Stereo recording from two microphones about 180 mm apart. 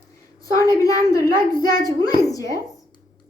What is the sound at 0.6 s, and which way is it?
A child's voice, 20° left (ahead or behind).